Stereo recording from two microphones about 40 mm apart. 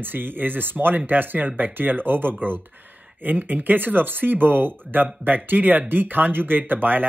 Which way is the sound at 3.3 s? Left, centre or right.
Right.